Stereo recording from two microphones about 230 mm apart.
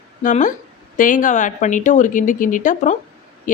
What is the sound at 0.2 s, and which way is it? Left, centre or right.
Speech, left.